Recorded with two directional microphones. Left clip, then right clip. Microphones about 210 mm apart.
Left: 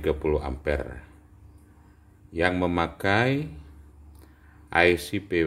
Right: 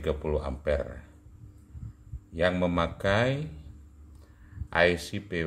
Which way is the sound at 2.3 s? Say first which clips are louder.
Left 2 dB; 35° left (ahead or behind).